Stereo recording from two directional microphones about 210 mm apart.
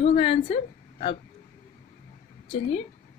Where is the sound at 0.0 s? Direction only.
25° left (ahead or behind).